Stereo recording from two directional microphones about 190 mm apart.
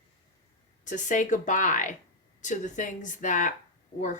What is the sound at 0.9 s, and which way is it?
A woman's voice, 40° left (ahead or behind).